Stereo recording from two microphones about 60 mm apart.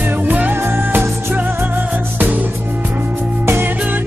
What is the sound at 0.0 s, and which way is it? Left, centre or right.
Music, right.